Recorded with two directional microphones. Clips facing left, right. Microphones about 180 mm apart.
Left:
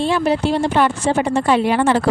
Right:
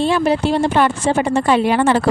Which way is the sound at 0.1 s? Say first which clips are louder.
Right 1 dB; 60° right (ahead or behind).